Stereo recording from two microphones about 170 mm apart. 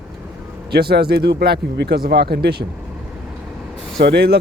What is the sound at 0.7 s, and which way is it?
Speech, 70° right (ahead or behind).